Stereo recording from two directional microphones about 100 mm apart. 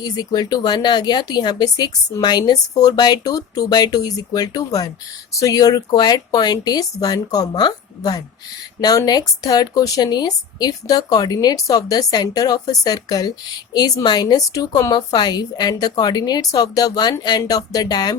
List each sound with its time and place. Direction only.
0.0 s a woman's voice: 40° left (ahead or behind)